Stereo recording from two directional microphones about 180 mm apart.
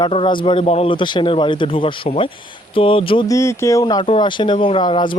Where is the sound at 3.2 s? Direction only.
15° left (ahead or behind).